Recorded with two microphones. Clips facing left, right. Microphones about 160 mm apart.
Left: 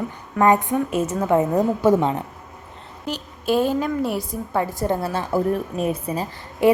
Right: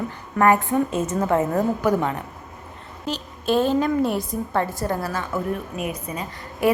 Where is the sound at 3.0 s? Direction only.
10° left (ahead or behind).